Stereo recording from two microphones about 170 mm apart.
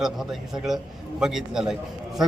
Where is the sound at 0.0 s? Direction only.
Centre (ahead or behind).